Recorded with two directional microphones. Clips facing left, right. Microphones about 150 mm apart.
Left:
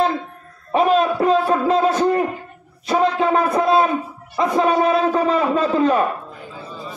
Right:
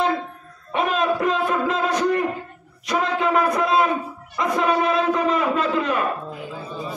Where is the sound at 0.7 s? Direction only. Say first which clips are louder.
Left 5 dB; 35° left (ahead or behind).